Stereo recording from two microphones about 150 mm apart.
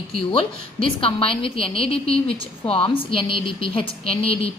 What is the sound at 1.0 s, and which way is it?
A woman's voice, 40° left (ahead or behind).